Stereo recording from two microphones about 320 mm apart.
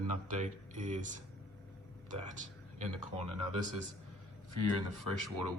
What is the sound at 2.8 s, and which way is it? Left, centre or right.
Speech, right.